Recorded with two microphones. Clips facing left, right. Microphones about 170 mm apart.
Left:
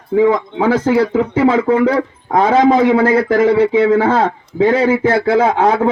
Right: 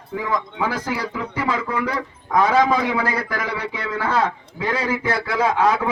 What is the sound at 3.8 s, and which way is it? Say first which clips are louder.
Speech: left 10 dB; 50° left (ahead or behind).